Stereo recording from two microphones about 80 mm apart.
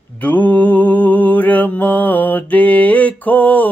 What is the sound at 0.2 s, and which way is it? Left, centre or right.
Mantra, centre.